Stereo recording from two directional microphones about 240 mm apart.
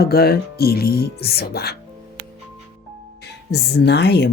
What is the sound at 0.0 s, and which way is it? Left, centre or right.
Speech, left.